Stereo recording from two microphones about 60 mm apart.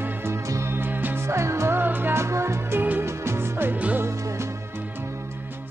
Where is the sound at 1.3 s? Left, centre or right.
Right.